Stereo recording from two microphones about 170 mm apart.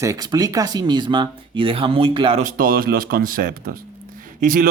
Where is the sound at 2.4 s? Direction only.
55° right (ahead or behind).